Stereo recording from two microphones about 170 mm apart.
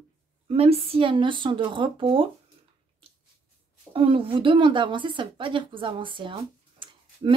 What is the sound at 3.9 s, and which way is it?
A woman's voice, 30° right (ahead or behind).